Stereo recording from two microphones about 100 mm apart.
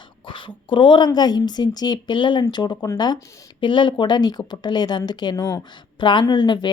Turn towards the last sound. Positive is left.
turn(degrees=50)  # may be behind; listen again after turning